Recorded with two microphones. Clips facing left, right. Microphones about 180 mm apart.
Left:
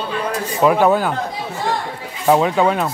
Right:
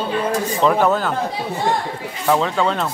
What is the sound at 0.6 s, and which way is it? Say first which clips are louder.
Speech: left 3 dB; 10° left (ahead or behind).